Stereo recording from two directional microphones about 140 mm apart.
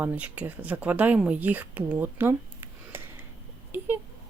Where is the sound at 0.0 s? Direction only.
10° right (ahead or behind).